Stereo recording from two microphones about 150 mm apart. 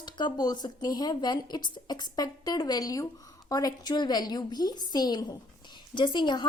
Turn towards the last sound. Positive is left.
turn(degrees=30)  # may be behind; listen again after turning